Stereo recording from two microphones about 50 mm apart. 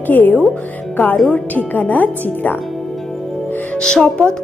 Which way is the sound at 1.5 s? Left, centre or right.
Left.